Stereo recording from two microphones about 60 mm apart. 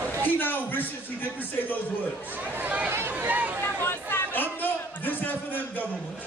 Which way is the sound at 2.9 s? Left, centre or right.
Right.